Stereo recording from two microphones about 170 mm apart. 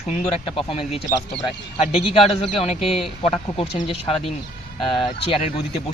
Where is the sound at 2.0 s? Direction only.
35° left (ahead or behind).